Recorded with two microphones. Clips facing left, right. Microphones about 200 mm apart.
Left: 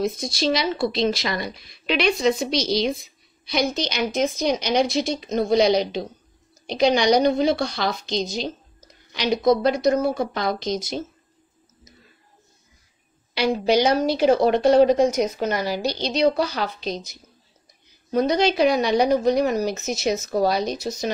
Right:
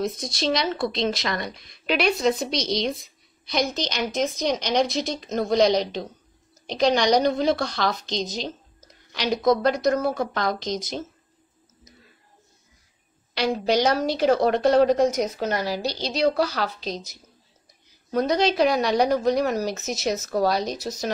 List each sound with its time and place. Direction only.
0.0 s speech: centre (ahead or behind)
13.3 s speech: 5° left (ahead or behind)
15.6 s a woman's voice: 20° left (ahead or behind)
16.0 s speech: 5° right (ahead or behind)